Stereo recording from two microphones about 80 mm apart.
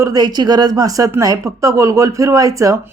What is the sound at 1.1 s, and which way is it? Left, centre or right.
A woman's voice, right.